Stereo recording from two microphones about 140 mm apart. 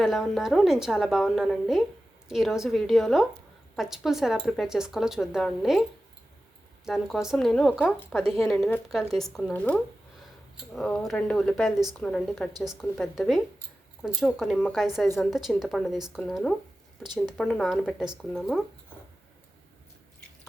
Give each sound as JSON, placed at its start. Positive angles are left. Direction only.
{"t": 0.0, "sound": "speech", "side_deg": 0}
{"t": 6.8, "sound": "speech", "side_deg": 0}
{"t": 17.0, "sound": "a woman's voice", "side_deg": -30}
{"t": 17.3, "sound": "speech", "side_deg": 5}